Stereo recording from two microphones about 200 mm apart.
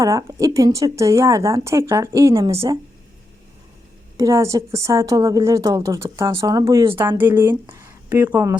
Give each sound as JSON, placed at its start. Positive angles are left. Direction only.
{"t": 0.0, "sound": "a woman's voice", "side_deg": -15}
{"t": 4.2, "sound": "a woman's voice", "side_deg": -15}